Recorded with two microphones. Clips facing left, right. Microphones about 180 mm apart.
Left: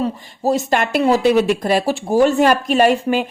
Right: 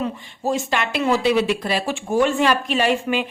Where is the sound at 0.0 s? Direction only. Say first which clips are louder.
Left 5 dB; 40° left (ahead or behind).